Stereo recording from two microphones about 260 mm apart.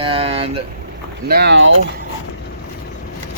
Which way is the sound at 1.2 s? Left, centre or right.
Right.